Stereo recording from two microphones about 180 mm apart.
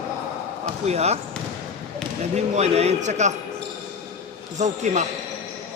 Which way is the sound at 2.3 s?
40° right (ahead or behind).